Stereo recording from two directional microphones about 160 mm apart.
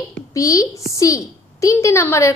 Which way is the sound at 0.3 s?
20° left (ahead or behind).